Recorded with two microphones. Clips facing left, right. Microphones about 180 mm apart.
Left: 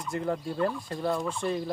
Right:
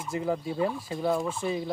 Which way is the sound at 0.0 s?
5° right (ahead or behind).